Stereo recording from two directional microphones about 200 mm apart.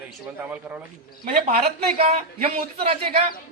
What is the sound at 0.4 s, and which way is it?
Speech, 10° right (ahead or behind).